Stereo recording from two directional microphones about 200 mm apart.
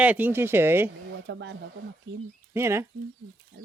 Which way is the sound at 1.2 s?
65° right (ahead or behind).